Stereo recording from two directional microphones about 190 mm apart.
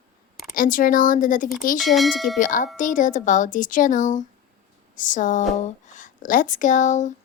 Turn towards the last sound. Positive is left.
turn(degrees=40)  # may be behind; listen again after turning